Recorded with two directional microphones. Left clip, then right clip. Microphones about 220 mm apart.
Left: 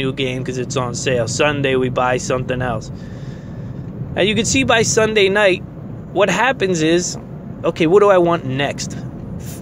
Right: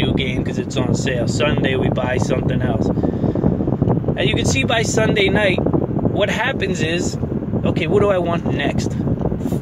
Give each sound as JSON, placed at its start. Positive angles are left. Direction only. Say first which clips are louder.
{"t": 0.7, "sound": "speech", "louder": "left 3 dB", "side_deg": 50}
{"t": 4.2, "sound": "speech", "louder": "left 6 dB", "side_deg": 50}